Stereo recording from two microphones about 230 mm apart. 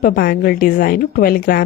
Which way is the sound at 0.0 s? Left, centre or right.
Left.